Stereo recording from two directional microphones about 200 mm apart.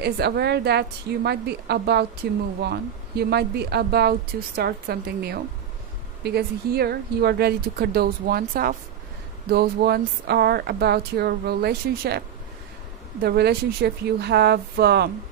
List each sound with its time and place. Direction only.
0.0 s a woman's voice: 55° right (ahead or behind)
13.2 s speech: 55° right (ahead or behind)